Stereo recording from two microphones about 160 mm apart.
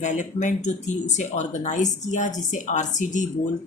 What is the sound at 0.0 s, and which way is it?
Speech, 50° left (ahead or behind).